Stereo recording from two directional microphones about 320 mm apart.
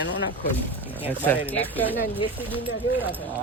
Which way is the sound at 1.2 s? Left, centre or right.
Centre.